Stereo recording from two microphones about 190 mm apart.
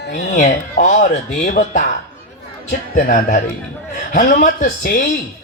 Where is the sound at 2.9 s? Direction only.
45° left (ahead or behind).